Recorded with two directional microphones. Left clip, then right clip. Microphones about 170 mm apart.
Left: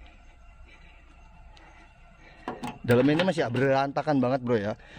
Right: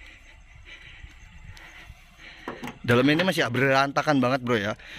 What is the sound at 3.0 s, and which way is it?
A man's voice, 10° left (ahead or behind).